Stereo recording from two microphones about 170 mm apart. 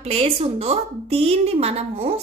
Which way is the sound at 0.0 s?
35° right (ahead or behind).